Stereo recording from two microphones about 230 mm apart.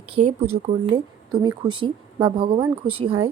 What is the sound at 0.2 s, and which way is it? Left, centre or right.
Speech, right.